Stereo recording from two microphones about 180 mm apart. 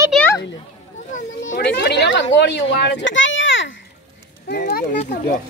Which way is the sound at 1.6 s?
70° left (ahead or behind).